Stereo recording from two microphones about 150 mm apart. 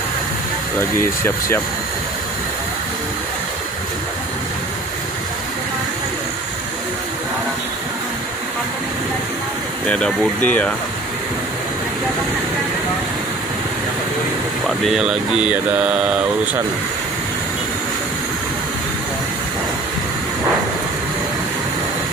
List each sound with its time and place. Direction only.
0.7 s speech: 15° left (ahead or behind)
9.8 s speech: 5° left (ahead or behind)
14.9 s mantra: 5° right (ahead or behind)